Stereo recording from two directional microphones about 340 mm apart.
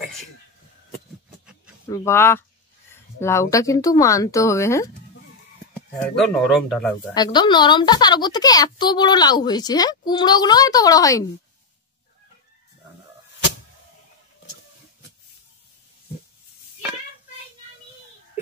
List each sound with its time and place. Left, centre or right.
1.9 s speech: centre
5.9 s speech: centre
7.2 s speech: centre